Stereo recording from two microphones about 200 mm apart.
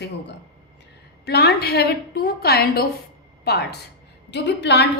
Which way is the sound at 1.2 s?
55° left (ahead or behind).